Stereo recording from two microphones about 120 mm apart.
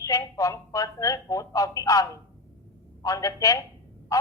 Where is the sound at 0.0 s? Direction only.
25° left (ahead or behind).